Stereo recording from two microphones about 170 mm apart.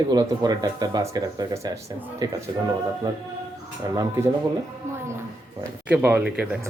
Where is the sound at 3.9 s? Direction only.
20° right (ahead or behind).